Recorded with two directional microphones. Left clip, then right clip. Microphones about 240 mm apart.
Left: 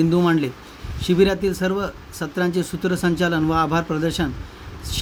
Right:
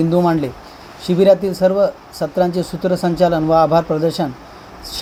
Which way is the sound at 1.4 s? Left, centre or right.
Left.